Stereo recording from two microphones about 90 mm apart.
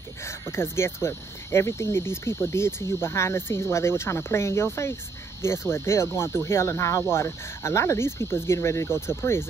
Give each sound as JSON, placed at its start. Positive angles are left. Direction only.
{"t": 0.2, "sound": "speech", "side_deg": 30}